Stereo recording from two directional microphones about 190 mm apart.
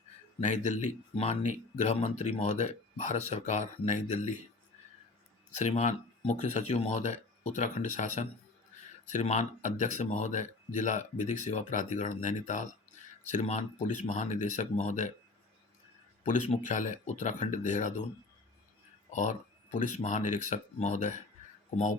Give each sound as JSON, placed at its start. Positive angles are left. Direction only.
{"t": 0.3, "sound": "speech", "side_deg": 35}
{"t": 5.5, "sound": "speech", "side_deg": 35}
{"t": 16.2, "sound": "speech", "side_deg": 40}
{"t": 19.1, "sound": "speech", "side_deg": 40}